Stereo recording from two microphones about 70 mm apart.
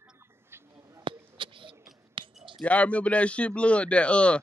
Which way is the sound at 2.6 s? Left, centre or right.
Centre.